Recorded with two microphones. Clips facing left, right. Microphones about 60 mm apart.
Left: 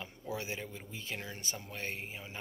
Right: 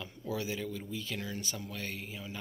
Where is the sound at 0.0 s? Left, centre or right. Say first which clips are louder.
Right 3 dB; left.